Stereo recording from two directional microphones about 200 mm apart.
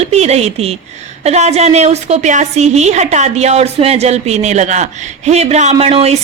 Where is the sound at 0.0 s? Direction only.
30° right (ahead or behind).